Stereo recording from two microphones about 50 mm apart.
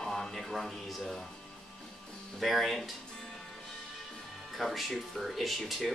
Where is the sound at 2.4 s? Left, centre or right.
Centre.